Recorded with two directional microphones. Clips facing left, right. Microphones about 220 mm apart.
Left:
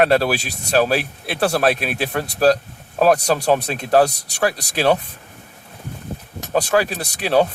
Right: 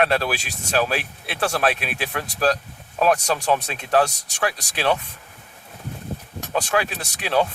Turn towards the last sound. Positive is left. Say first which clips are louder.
# left 5 dB
turn(degrees=40)  # may be behind; listen again after turning